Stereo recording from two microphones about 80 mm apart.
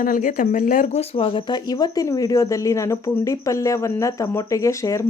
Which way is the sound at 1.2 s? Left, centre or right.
Left.